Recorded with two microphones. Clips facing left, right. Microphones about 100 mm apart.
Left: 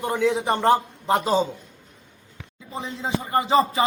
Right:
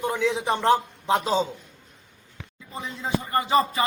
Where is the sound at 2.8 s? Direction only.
30° left (ahead or behind).